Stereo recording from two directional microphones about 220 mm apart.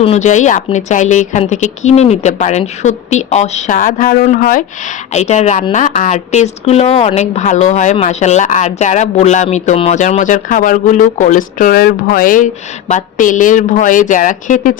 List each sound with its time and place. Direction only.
0.0 s a woman's voice: 30° left (ahead or behind)